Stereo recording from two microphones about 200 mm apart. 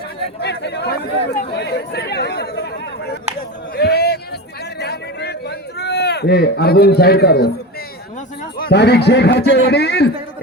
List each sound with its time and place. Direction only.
0.4 s a man's voice: 55° left (ahead or behind)
3.8 s a sound: 55° left (ahead or behind)
8.5 s a man's voice: 55° left (ahead or behind)